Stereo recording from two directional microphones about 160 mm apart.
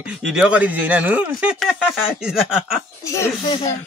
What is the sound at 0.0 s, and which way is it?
Speech, 5° right (ahead or behind).